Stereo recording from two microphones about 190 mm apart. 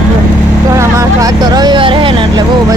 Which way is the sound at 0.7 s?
15° right (ahead or behind).